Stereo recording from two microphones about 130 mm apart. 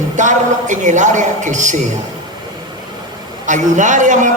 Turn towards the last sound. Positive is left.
turn(degrees=-75)  # may be behind; listen again after turning